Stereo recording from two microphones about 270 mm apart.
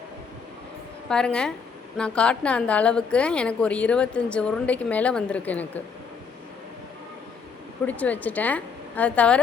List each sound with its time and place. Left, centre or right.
1.1 s a woman's voice: centre
7.9 s a woman's voice: centre